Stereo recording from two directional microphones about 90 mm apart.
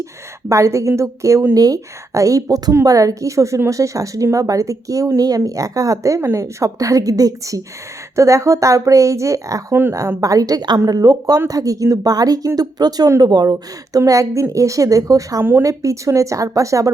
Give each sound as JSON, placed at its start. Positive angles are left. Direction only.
{"t": 0.0, "sound": "a woman's voice", "side_deg": -35}